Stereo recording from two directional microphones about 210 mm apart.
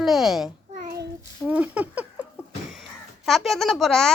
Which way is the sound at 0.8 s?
50° right (ahead or behind).